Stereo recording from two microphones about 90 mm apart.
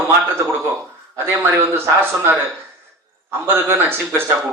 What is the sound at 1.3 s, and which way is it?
A man's voice, 25° right (ahead or behind).